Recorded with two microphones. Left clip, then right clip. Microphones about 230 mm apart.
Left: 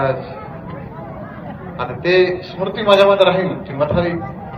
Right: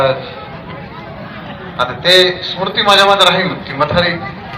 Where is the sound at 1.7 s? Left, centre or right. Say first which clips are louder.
Right 5 dB; left.